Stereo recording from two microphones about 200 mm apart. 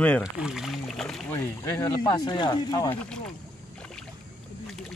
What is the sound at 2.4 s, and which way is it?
Speech, 20° left (ahead or behind).